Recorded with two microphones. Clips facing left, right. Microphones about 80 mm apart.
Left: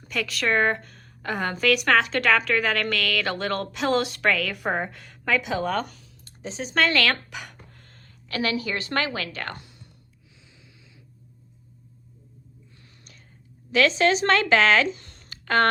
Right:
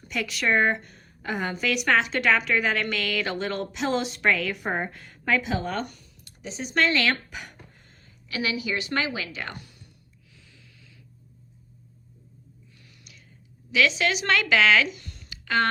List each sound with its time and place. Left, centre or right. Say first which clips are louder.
0.1 s speech: left 1 dB; left
0.4 s a woman's voice: even; left
4.6 s speech: left 2 dB; left
6.2 s a sound: left 2 dB; left
6.8 s a sound: left 1 dB; left
7.9 s a woman's voice: left 3 dB; left
13.7 s speech: left 3 dB; left